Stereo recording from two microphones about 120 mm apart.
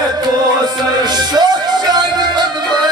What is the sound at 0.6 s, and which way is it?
Music, 35° right (ahead or behind).